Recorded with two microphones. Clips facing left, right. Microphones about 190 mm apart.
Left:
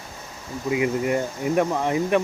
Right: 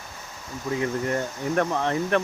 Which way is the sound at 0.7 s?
10° left (ahead or behind).